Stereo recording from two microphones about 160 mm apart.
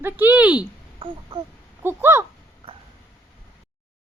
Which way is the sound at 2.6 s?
35° right (ahead or behind).